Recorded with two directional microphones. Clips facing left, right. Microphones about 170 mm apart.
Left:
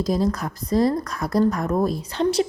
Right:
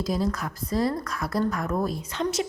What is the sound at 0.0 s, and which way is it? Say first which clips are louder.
A woman's voice: left 5 dB; 40° left (ahead or behind).